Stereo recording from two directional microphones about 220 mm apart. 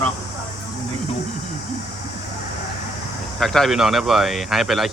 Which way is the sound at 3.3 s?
Centre (ahead or behind).